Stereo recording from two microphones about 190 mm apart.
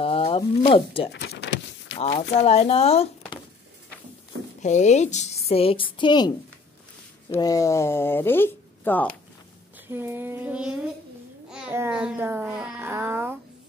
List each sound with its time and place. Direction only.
0.0 s a sound: 30° left (ahead or behind)
0.6 s speech: 30° left (ahead or behind)
1.1 s a sound: 60° left (ahead or behind)
2.4 s speech: 35° left (ahead or behind)
4.6 s a woman's voice: 40° left (ahead or behind); by 9.1 s 10° left (ahead or behind)
9.8 s child singing: 10° right (ahead or behind)
11.5 s a child's voice: 10° right (ahead or behind)